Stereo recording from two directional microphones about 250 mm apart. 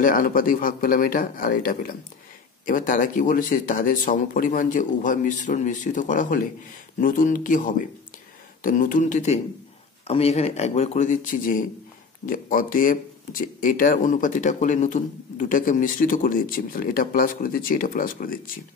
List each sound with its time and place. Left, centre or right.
0.0 s speech: left